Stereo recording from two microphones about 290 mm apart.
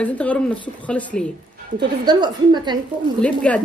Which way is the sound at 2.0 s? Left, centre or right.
Centre.